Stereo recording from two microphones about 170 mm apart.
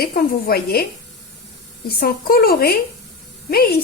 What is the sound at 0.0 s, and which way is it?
Speech, 60° left (ahead or behind).